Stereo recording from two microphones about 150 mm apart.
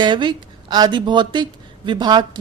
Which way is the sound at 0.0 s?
30° right (ahead or behind).